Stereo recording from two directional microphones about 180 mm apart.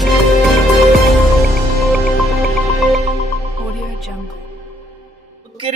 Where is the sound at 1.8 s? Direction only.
Centre (ahead or behind).